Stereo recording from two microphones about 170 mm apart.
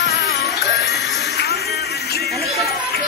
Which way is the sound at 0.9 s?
Centre (ahead or behind).